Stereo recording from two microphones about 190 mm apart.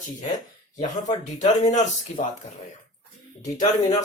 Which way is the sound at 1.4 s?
40° left (ahead or behind).